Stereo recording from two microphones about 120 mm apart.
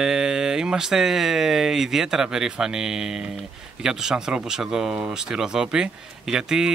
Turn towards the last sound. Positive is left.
turn(degrees=-5)  # may be behind; listen again after turning